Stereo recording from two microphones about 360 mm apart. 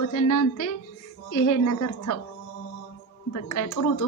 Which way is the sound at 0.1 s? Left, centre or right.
Left.